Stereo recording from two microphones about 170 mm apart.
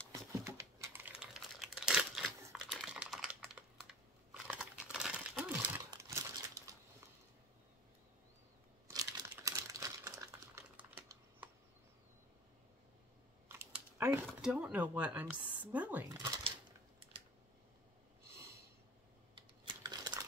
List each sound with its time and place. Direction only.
0.1 s typing: 15° right (ahead or behind)
1.2 s computer keyboard: 5° right (ahead or behind)
2.5 s typing: centre (ahead or behind)
5.9 s crumpling: 15° right (ahead or behind)
8.8 s crumpling: 15° right (ahead or behind)
13.5 s a sound: 15° right (ahead or behind)
15.5 s speech: 10° right (ahead or behind)
16.1 s a sound: 25° right (ahead or behind)
19.3 s computer keyboard: 25° right (ahead or behind)